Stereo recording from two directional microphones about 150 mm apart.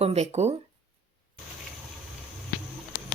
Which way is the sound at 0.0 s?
45° right (ahead or behind).